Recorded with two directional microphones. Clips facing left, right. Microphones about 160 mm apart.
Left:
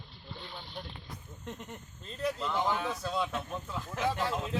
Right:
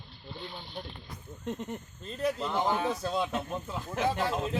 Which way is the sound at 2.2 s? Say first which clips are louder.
Right 2 dB; 35° right (ahead or behind).